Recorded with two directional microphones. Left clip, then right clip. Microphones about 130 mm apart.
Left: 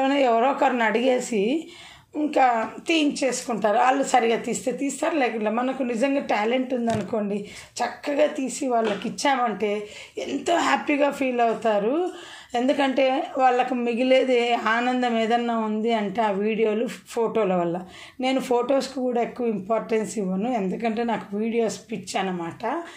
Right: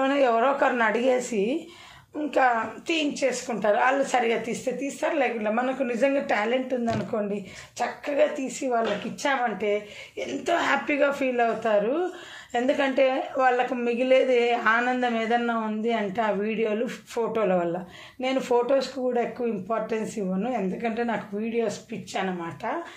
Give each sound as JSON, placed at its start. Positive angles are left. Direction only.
{"t": 0.0, "sound": "a woman's voice", "side_deg": 30}
{"t": 2.9, "sound": "a woman's voice", "side_deg": 45}
{"t": 5.5, "sound": "a woman's voice", "side_deg": 30}
{"t": 9.0, "sound": "a woman's voice", "side_deg": 45}